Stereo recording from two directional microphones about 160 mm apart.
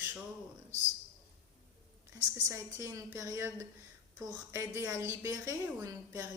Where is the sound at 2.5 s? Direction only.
15° right (ahead or behind).